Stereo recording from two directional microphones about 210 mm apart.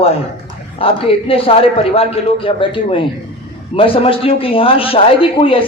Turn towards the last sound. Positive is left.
turn(degrees=25)  # may be behind; listen again after turning